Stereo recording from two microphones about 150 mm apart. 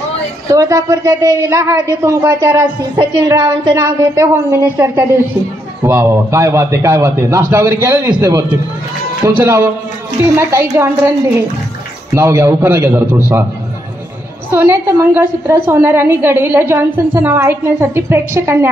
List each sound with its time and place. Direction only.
0.5 s a woman's voice: 20° right (ahead or behind)
14.5 s a woman's voice: 15° right (ahead or behind)